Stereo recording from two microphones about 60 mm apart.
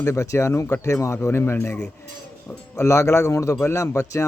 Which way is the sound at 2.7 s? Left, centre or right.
Left.